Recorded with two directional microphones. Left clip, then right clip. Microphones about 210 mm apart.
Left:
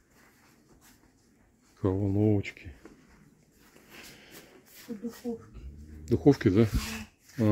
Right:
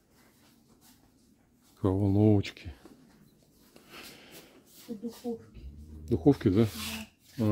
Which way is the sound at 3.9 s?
15° right (ahead or behind).